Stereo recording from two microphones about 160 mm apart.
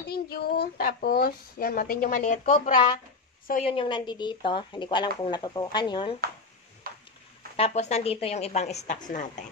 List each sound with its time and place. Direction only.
0.0 s speech: 75° left (ahead or behind); by 2.7 s 45° left (ahead or behind)
3.6 s speech: 35° left (ahead or behind)
6.8 s a sound: 65° right (ahead or behind)
7.5 s a woman's voice: 40° left (ahead or behind)